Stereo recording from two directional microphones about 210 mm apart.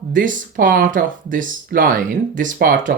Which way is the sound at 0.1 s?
40° right (ahead or behind).